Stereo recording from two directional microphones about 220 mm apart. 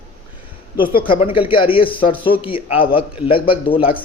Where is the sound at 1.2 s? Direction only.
25° left (ahead or behind).